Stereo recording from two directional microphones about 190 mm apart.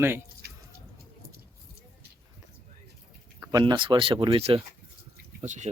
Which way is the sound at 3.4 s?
20° right (ahead or behind).